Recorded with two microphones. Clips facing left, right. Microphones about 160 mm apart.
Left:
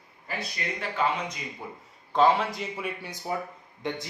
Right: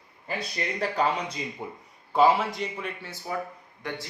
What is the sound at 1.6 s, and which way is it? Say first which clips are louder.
Speech: right 3 dB; 20° right (ahead or behind).